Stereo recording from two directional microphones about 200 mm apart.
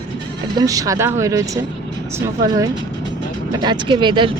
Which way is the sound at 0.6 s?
15° right (ahead or behind).